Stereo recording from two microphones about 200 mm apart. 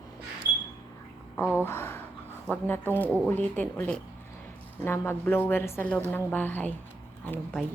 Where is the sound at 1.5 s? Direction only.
10° left (ahead or behind).